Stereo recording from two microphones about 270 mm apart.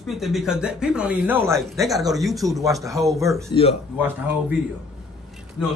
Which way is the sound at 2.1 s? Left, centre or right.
Centre.